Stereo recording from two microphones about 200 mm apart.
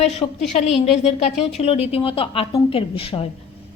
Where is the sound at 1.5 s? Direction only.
30° left (ahead or behind).